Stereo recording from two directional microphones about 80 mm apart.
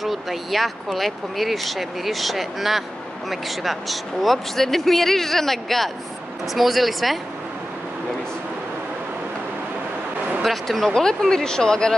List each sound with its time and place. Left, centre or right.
0.0 s speech: centre
10.4 s speech: centre